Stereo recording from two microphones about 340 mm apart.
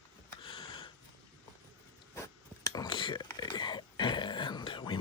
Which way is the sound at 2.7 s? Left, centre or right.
Centre.